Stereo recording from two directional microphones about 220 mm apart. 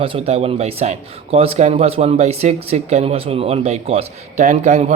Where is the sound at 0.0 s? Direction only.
25° right (ahead or behind).